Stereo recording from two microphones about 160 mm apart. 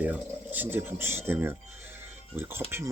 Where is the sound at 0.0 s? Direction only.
10° right (ahead or behind).